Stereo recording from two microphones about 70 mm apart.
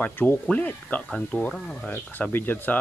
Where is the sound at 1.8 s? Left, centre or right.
Left.